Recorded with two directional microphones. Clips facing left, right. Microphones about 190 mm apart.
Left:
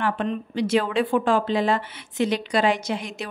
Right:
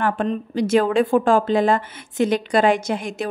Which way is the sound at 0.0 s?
45° right (ahead or behind).